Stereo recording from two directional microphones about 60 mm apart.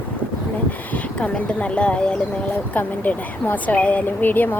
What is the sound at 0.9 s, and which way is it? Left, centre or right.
Speech, left.